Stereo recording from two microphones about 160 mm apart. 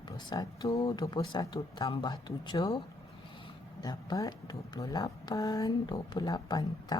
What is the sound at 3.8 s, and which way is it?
Speech, 25° left (ahead or behind).